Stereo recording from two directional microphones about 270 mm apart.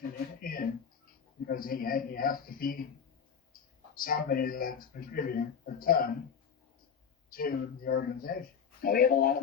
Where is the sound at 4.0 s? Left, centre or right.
Left.